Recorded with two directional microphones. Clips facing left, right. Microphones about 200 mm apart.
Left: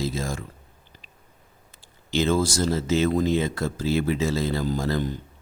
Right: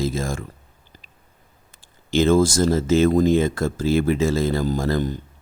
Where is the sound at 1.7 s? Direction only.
50° right (ahead or behind).